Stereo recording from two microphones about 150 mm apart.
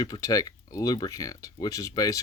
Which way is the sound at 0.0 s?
25° left (ahead or behind).